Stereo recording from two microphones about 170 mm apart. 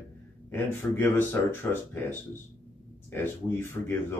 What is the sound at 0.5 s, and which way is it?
Speech, 10° left (ahead or behind).